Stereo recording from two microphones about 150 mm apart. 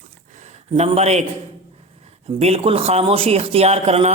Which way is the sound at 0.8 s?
45° right (ahead or behind).